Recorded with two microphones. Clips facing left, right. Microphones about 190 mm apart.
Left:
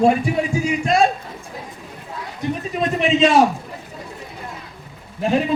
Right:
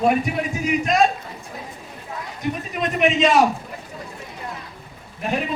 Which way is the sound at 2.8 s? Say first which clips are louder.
Left 2 dB; 30° left (ahead or behind).